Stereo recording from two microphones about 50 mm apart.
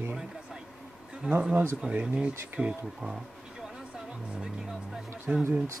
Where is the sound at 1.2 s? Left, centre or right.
Right.